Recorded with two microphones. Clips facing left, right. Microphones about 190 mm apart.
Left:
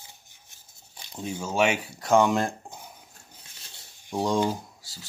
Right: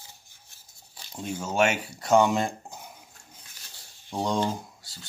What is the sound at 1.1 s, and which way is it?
Speech, centre (ahead or behind).